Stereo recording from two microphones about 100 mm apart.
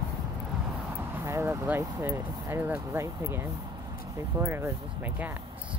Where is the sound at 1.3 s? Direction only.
25° right (ahead or behind).